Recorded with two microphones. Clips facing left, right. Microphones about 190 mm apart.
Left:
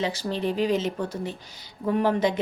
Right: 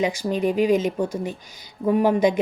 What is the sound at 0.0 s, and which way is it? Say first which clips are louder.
A woman's voice: right 5 dB; 10° right (ahead or behind).